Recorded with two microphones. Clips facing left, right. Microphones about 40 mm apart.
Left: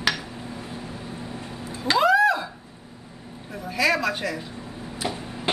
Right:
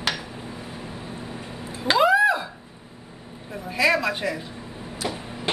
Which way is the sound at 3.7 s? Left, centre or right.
Centre.